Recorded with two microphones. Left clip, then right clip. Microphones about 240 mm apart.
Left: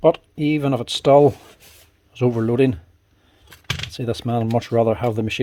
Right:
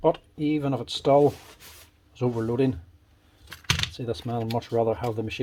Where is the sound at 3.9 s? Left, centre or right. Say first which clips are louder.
Left 7 dB; left.